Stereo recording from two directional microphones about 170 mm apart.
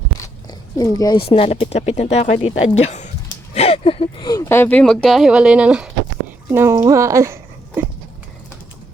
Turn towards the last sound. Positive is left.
turn(degrees=-15)  # may be behind; listen again after turning